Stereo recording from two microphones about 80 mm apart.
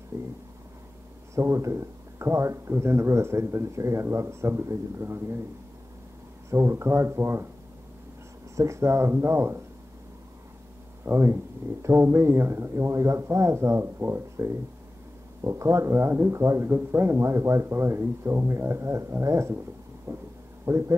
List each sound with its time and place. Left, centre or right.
0.1 s a sound: right
1.3 s speech: right
6.5 s speech: right
8.5 s speech: right
11.1 s speech: right